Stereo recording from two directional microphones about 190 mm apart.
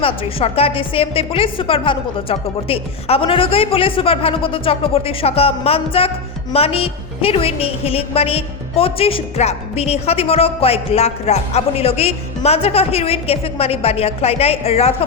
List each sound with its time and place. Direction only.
0.0 s a woman's voice: 30° left (ahead or behind)